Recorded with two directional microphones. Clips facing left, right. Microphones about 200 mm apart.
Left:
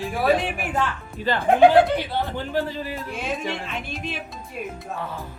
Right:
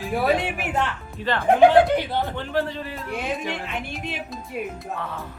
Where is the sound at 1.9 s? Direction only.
15° right (ahead or behind).